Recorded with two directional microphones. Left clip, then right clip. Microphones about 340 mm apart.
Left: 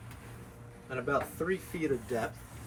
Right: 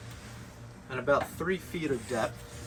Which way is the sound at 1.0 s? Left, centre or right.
Centre.